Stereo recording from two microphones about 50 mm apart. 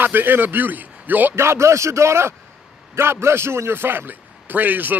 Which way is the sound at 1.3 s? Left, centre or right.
Right.